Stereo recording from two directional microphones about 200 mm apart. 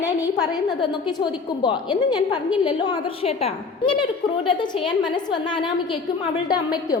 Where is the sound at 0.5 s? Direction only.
20° left (ahead or behind).